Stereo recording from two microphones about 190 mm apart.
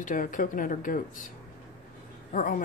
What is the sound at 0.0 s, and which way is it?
Speech, 45° left (ahead or behind).